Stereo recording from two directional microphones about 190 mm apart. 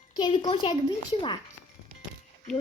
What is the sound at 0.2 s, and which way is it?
Speech, 25° left (ahead or behind).